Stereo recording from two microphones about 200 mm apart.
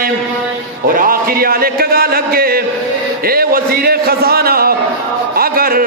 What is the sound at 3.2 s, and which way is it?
Speech, 50° right (ahead or behind).